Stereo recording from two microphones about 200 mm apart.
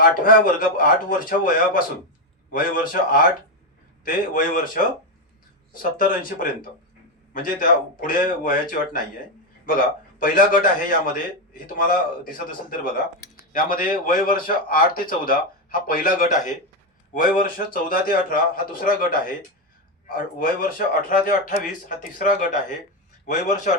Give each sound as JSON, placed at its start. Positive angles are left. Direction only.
{"t": 0.0, "sound": "speech", "side_deg": 45}
{"t": 6.0, "sound": "speech", "side_deg": 45}
{"t": 10.2, "sound": "a man's voice", "side_deg": 45}